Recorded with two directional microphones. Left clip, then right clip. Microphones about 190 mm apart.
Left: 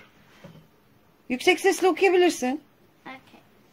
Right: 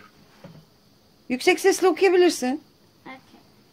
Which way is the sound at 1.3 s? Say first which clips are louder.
Right 2 dB; centre (ahead or behind).